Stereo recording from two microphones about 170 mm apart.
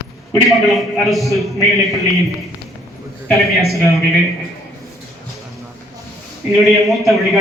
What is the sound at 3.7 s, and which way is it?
Speech, 20° left (ahead or behind).